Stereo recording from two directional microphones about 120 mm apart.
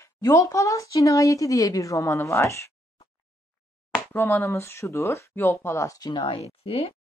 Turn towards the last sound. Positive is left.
turn(degrees=55)  # may be behind; listen again after turning